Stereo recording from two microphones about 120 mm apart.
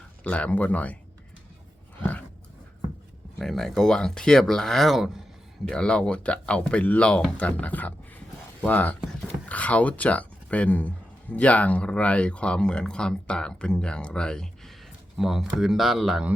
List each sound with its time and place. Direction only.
0.3 s speech: 10° left (ahead or behind)
3.3 s speech: 5° left (ahead or behind)